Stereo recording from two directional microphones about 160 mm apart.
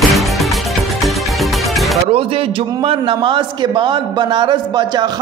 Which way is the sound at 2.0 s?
35° right (ahead or behind).